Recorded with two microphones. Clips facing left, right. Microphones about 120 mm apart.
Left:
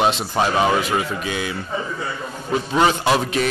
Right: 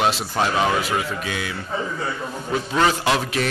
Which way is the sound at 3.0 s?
Centre (ahead or behind).